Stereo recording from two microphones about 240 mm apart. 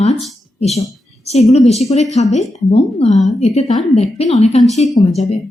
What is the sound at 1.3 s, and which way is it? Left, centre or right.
A woman's voice, left.